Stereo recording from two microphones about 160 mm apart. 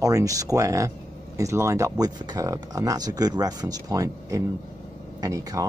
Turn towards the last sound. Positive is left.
turn(degrees=-20)  # may be behind; listen again after turning